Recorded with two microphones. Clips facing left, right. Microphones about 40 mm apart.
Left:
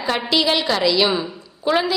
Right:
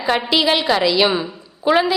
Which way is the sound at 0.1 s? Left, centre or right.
Centre.